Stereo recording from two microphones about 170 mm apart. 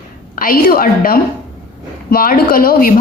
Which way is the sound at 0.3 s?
55° left (ahead or behind).